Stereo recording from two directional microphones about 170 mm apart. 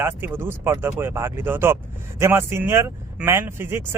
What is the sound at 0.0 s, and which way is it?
Speech, 15° right (ahead or behind).